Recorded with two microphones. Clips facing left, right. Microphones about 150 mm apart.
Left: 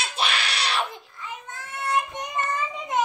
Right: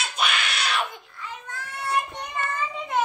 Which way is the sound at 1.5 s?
20° left (ahead or behind).